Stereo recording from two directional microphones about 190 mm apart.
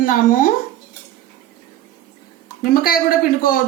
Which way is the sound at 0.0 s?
45° left (ahead or behind).